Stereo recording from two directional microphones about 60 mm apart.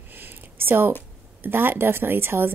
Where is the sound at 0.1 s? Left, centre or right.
Right.